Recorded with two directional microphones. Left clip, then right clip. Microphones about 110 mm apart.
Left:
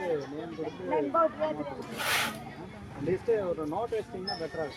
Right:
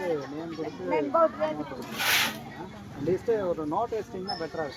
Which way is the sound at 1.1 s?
35° right (ahead or behind).